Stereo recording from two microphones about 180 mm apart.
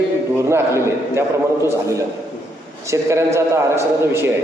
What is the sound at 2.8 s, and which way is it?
A man's voice, 15° right (ahead or behind).